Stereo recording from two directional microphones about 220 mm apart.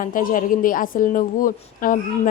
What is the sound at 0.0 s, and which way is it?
A woman's voice, 40° left (ahead or behind).